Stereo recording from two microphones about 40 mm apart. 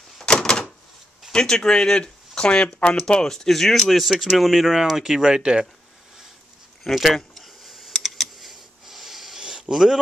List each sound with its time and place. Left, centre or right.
0.2 s door: left
1.3 s speech: centre
6.8 s speech: centre
7.3 s computer keyboard: centre
8.8 s hiss: centre
9.4 s a sound: centre